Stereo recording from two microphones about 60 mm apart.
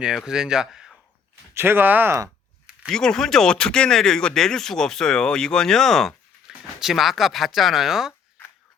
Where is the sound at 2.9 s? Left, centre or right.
Centre.